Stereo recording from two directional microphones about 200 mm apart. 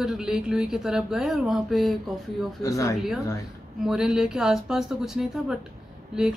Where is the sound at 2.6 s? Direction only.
15° left (ahead or behind).